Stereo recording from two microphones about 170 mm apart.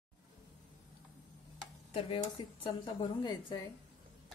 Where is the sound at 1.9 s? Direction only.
30° left (ahead or behind).